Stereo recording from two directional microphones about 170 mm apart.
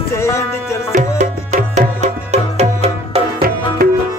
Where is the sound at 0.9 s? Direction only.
45° right (ahead or behind).